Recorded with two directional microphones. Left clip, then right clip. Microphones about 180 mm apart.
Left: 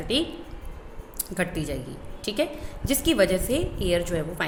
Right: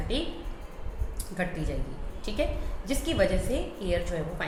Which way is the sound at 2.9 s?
55° left (ahead or behind).